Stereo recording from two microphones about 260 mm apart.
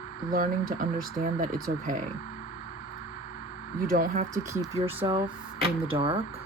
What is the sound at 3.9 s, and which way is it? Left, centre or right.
Speech, right.